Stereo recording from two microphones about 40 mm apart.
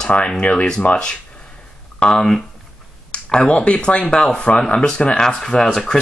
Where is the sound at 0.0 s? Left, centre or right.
Left.